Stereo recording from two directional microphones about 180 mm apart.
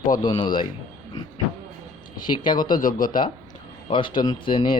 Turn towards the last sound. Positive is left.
turn(degrees=25)  # may be behind; listen again after turning